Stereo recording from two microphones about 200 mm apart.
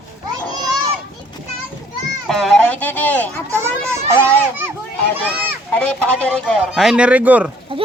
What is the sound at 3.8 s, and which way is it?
Children playing, 10° right (ahead or behind).